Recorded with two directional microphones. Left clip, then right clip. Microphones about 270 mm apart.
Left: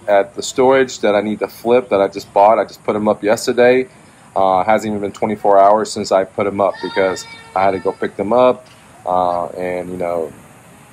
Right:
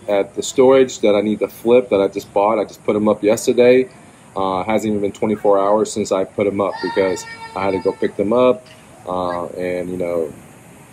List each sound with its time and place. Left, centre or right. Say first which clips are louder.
0.0 s speech: left 4 dB; centre